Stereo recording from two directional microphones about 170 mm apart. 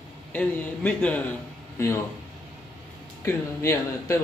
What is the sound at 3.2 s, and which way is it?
Speech, 15° left (ahead or behind).